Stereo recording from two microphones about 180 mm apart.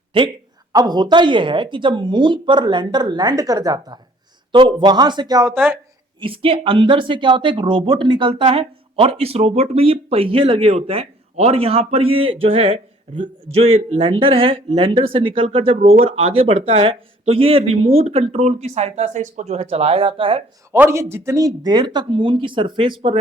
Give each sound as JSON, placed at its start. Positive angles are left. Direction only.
{"t": 0.7, "sound": "speech", "side_deg": -20}
{"t": 6.1, "sound": "speech", "side_deg": -30}
{"t": 20.7, "sound": "speech", "side_deg": -15}